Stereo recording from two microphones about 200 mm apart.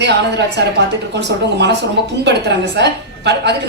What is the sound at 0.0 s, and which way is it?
A woman's voice, 60° right (ahead or behind).